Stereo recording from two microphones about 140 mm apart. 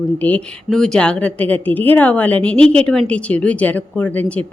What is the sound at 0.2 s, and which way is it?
Speech, 10° left (ahead or behind).